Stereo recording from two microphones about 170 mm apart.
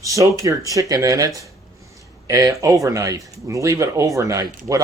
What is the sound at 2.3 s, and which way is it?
Speech, 20° right (ahead or behind).